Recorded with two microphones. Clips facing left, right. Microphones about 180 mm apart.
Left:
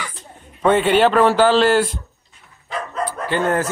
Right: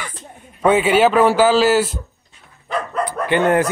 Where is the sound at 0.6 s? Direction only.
10° right (ahead or behind).